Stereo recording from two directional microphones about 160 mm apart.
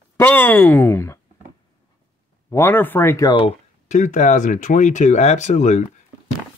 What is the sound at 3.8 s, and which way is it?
Speech, 50° left (ahead or behind).